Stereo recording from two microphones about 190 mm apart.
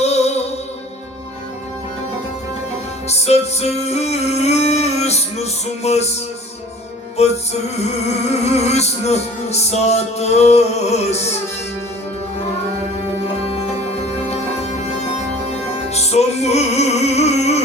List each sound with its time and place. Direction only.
0.0 s music: 35° left (ahead or behind)
3.1 s music: 35° left (ahead or behind)
7.2 s music: 35° left (ahead or behind)
15.9 s music: 35° left (ahead or behind)